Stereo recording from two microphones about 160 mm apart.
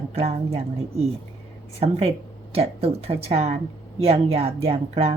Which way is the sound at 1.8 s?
40° right (ahead or behind).